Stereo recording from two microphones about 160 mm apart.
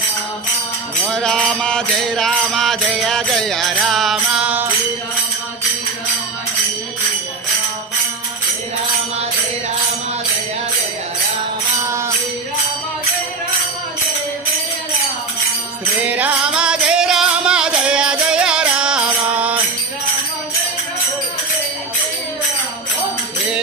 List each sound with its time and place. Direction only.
1.1 s mantra: 5° left (ahead or behind)
11.9 s music: 15° right (ahead or behind)
16.0 s music: 10° right (ahead or behind)